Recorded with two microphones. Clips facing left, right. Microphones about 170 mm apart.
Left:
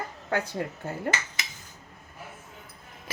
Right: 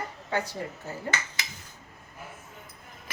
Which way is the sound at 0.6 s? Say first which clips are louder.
Left 3 dB; 70° left (ahead or behind).